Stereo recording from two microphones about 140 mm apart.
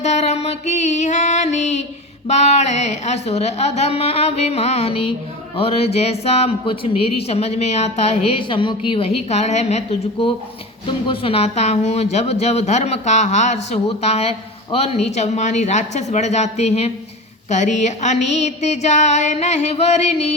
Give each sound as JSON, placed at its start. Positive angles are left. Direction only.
{"t": 0.0, "sound": "music", "side_deg": 55}
{"t": 2.2, "sound": "a woman's voice", "side_deg": 50}
{"t": 9.3, "sound": "a woman's voice", "side_deg": 55}
{"t": 17.5, "sound": "a sound", "side_deg": 55}